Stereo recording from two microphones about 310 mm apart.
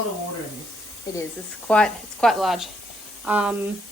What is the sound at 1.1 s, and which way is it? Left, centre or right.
Speech, centre.